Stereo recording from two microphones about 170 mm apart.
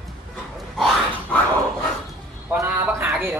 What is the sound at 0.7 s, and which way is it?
Dog, centre (ahead or behind).